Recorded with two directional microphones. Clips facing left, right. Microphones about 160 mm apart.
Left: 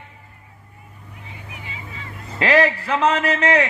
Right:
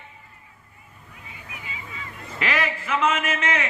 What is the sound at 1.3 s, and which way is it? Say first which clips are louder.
Vehicle: left 2 dB; 30° left (ahead or behind).